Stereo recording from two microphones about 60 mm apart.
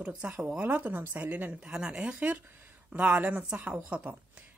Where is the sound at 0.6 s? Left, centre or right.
Right.